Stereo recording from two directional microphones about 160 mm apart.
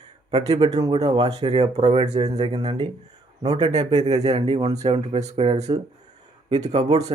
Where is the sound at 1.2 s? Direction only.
40° right (ahead or behind).